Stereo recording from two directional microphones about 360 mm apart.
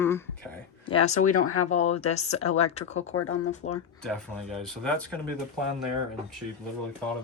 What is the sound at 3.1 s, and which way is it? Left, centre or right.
Speech, left.